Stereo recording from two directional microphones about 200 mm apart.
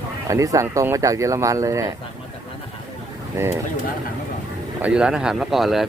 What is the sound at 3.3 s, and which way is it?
Speech, 10° right (ahead or behind).